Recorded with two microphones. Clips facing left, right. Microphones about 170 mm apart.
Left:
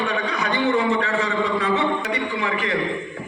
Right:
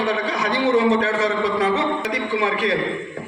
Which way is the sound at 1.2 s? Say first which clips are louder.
Right 2 dB; 75° right (ahead or behind).